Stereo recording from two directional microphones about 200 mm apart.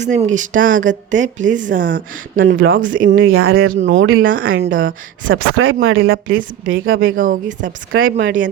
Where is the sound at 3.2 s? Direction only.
90° right.